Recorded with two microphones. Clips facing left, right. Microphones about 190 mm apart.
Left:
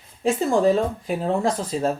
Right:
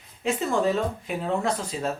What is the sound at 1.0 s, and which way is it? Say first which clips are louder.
Speech: left 4 dB; 35° left (ahead or behind).